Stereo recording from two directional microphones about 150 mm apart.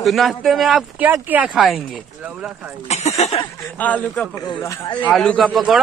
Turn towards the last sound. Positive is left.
turn(degrees=-5)  # may be behind; listen again after turning